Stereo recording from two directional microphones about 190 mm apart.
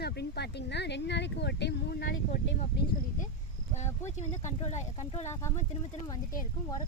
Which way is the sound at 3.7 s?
35° left (ahead or behind).